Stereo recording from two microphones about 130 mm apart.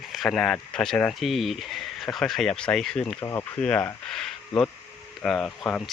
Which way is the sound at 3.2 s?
20° left (ahead or behind).